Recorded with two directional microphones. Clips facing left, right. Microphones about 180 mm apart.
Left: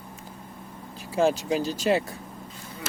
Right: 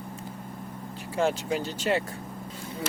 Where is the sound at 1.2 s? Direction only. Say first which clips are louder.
Left 3 dB; 15° left (ahead or behind).